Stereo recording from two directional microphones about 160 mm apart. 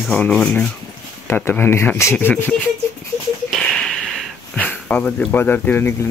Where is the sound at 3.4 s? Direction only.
Centre (ahead or behind).